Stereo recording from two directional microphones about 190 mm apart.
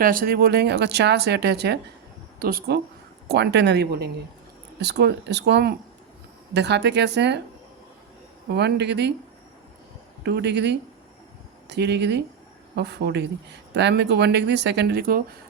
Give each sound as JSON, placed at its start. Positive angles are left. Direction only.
{"t": 0.0, "sound": "speech", "side_deg": -50}
{"t": 8.4, "sound": "speech", "side_deg": -60}
{"t": 10.2, "sound": "speech", "side_deg": -65}